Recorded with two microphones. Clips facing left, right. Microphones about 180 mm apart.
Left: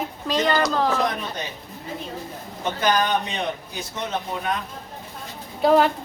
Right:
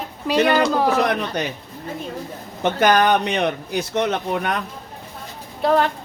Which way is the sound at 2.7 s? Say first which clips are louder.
Right 5 dB; 70° right (ahead or behind).